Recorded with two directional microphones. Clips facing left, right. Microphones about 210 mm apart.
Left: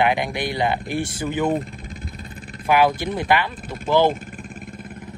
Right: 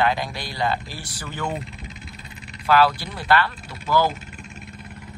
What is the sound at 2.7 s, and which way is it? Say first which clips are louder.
Speech: left 1 dB; 15° left (ahead or behind).